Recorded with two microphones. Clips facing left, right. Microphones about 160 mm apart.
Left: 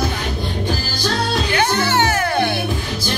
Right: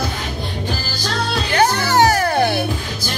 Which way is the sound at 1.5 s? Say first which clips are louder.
Right 4 dB; 40° right (ahead or behind).